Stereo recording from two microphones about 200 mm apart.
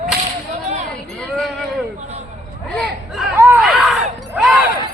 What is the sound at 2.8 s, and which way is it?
Chatter, centre (ahead or behind).